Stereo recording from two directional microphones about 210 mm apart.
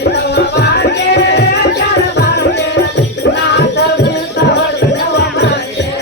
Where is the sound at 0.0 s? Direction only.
55° left (ahead or behind).